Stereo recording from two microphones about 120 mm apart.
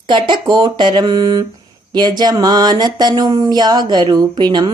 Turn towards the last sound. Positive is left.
turn(degrees=-35)  # may be behind; listen again after turning